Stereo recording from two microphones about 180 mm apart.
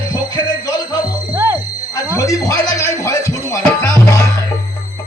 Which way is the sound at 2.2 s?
20° left (ahead or behind).